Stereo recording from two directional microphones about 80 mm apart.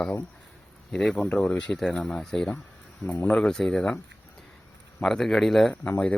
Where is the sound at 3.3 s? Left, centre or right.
Centre.